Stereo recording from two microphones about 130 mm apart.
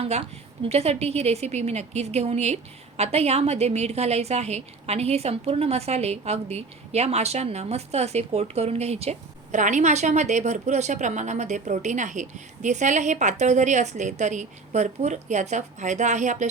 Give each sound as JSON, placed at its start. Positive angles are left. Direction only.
{"t": 0.0, "sound": "a woman's voice", "side_deg": -50}